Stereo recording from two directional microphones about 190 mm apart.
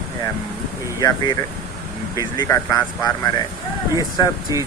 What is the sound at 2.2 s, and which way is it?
Speech, 15° left (ahead or behind).